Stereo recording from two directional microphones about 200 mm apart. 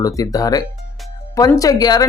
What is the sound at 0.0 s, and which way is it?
Speech, 15° left (ahead or behind).